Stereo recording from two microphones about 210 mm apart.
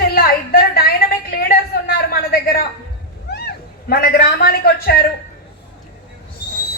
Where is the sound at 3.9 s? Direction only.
45° left (ahead or behind).